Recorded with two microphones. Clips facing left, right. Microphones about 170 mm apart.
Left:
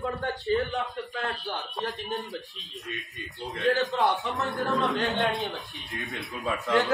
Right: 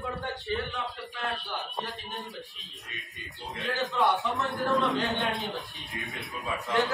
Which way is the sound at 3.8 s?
Centre (ahead or behind).